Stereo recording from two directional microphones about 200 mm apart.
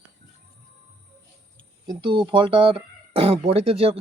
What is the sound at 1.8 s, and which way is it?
A man's voice, 25° right (ahead or behind).